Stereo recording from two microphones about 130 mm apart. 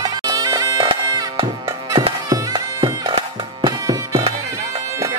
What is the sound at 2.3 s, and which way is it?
Music, 30° right (ahead or behind).